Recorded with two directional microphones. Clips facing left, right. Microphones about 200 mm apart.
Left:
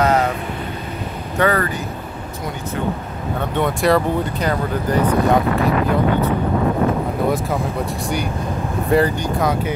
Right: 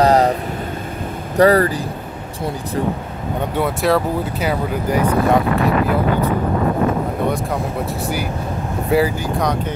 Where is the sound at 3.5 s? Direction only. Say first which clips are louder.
Left 1 dB; 5° right (ahead or behind).